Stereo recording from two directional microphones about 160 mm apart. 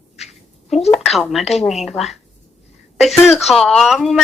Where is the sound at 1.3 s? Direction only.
Centre (ahead or behind).